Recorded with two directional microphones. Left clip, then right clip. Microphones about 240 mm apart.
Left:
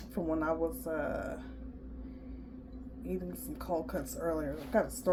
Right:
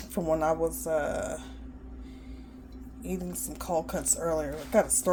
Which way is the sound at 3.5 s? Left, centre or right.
Right.